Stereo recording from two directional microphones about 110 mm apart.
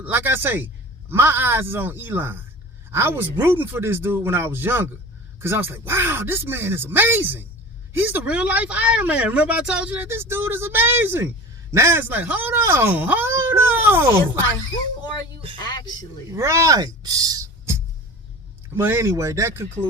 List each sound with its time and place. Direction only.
0.0 s speech: 20° right (ahead or behind)
10.0 s speech: 20° right (ahead or behind)
15.6 s a sound: 40° left (ahead or behind)
16.3 s speech: 25° right (ahead or behind)
18.7 s speech: 20° right (ahead or behind)